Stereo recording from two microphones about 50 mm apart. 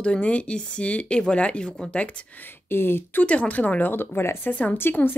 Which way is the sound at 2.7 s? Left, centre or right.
Left.